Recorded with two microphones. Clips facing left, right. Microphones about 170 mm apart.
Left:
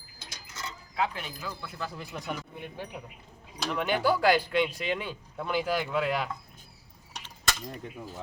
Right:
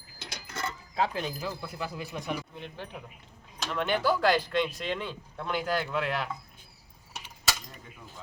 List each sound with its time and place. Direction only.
0.2 s coin: 65° right (ahead or behind)
0.9 s speech: 35° right (ahead or behind)
1.8 s speech: centre (ahead or behind)
2.6 s speech: 10° left (ahead or behind)
7.1 s mechanisms: 5° right (ahead or behind)